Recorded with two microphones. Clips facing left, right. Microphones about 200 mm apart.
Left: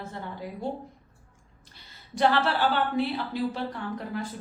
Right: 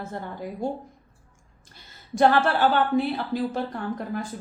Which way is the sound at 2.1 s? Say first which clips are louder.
Right 4 dB; 45° right (ahead or behind).